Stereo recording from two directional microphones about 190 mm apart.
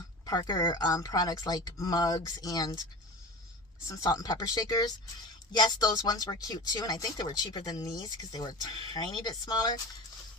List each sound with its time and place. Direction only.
0.3 s speech: 20° left (ahead or behind)
3.8 s speech: 15° left (ahead or behind)